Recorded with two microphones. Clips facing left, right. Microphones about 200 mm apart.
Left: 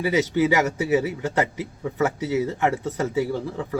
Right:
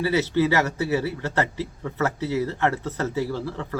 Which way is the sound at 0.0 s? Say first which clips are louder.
Left 1 dB; 15° left (ahead or behind).